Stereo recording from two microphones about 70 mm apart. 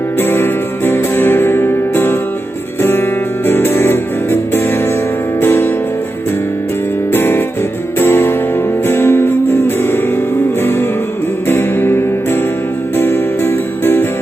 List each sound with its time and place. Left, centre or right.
0.2 s music: left
3.4 s music: left
7.1 s music: left